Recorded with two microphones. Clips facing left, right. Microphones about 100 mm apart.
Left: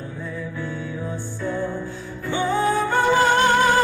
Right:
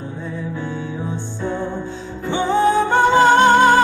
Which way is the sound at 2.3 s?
25° right (ahead or behind).